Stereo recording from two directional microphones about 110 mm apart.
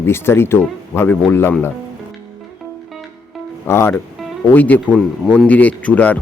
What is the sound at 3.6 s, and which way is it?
Speech, 20° left (ahead or behind).